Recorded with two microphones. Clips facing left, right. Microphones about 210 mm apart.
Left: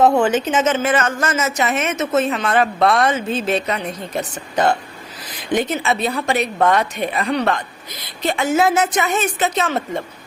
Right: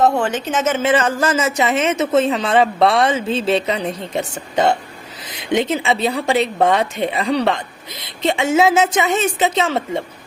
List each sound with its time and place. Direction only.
0.0 s speech: 5° left (ahead or behind)
0.8 s a man's voice: 25° right (ahead or behind)